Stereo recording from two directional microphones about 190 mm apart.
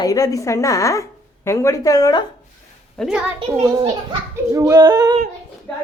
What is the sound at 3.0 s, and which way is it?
Speech, 5° left (ahead or behind).